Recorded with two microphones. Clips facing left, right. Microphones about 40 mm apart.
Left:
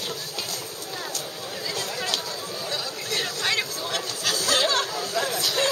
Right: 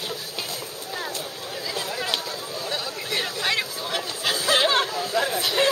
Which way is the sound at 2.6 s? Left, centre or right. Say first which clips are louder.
Right 2 dB; centre.